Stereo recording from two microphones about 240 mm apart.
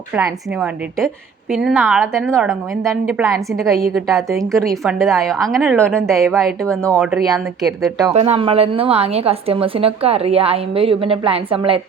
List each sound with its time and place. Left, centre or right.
0.2 s a woman's voice: centre
8.1 s a woman's voice: right